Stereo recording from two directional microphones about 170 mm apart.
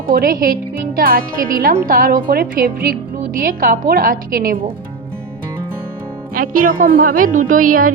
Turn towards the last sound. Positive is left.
turn(degrees=-55)  # may be behind; listen again after turning